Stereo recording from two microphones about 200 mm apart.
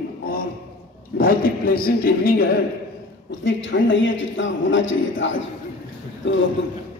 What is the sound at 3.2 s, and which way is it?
A man's voice, 65° left (ahead or behind).